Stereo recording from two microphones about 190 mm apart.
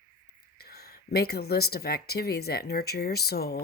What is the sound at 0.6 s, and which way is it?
Speech, 55° left (ahead or behind).